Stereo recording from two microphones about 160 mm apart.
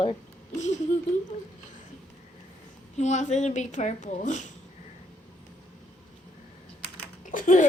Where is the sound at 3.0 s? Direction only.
45° left (ahead or behind).